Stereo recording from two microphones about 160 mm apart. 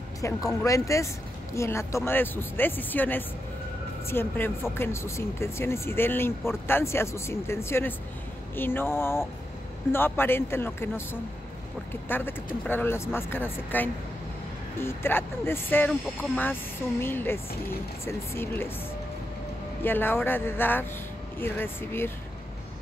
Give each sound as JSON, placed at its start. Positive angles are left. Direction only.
{"t": 0.2, "sound": "speech", "side_deg": 15}
{"t": 17.0, "sound": "speech", "side_deg": 15}
{"t": 19.8, "sound": "speech", "side_deg": 15}